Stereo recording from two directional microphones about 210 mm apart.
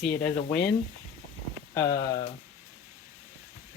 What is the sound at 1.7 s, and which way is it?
Speech, 15° left (ahead or behind).